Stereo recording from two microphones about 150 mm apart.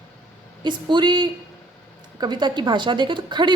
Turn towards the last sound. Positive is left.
turn(degrees=-30)  # may be behind; listen again after turning